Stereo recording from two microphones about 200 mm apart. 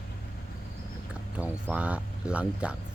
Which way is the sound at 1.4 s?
5° right (ahead or behind).